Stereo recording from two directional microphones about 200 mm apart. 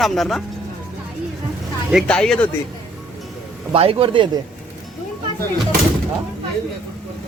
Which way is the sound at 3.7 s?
30° right (ahead or behind).